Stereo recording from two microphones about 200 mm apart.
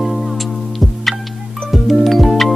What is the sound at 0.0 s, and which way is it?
Music, centre (ahead or behind).